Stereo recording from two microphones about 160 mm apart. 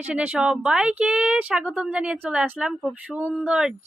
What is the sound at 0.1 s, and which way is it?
A woman's voice, 5° right (ahead or behind).